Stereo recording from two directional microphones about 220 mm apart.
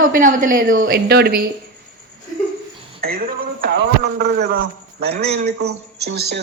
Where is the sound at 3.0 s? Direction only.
40° right (ahead or behind).